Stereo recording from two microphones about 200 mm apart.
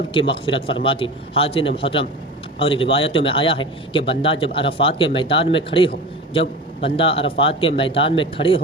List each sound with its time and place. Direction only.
0.1 s a man's voice: 25° left (ahead or behind)